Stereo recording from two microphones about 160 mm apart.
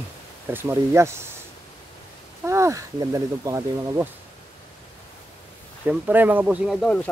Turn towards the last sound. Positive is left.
turn(degrees=5)  # may be behind; listen again after turning